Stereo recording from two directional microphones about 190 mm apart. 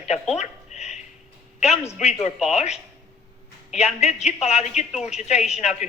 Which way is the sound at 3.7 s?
35° left (ahead or behind).